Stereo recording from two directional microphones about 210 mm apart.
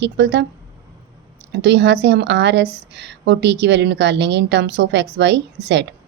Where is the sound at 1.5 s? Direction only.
55° right (ahead or behind).